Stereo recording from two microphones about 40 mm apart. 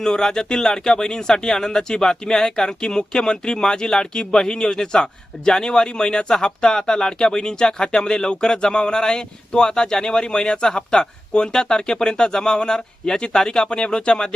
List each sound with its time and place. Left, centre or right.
0.0 s speech: centre